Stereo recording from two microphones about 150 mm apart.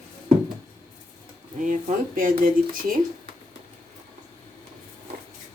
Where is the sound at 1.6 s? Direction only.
60° right (ahead or behind).